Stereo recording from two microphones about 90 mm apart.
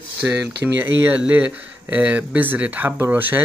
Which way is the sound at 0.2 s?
25° right (ahead or behind).